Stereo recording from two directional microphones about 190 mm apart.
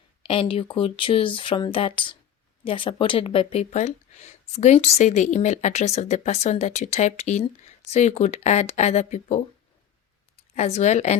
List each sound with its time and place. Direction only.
0.2 s speech: 30° left (ahead or behind)
10.5 s speech: 35° left (ahead or behind)